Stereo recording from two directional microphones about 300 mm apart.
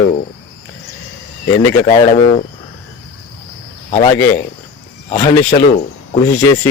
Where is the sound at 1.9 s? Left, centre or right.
Left.